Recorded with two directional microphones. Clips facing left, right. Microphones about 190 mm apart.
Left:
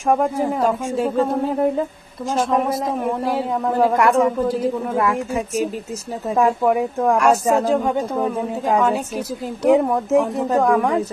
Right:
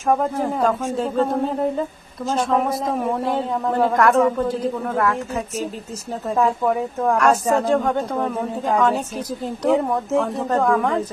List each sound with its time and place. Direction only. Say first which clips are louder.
0.1 s a man's voice: left 2 dB; 10° left (ahead or behind)